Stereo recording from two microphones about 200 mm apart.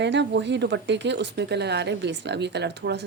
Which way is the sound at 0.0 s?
60° right (ahead or behind).